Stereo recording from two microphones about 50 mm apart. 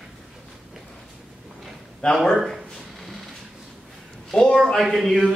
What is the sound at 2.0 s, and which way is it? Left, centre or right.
Speech, centre.